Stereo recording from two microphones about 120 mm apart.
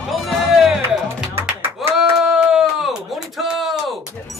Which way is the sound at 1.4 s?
20° right (ahead or behind).